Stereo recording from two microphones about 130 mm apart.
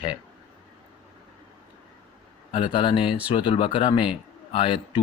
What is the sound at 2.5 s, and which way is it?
Speech, 40° left (ahead or behind).